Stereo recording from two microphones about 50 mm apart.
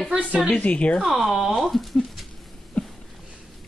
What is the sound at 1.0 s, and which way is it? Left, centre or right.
Speech, centre.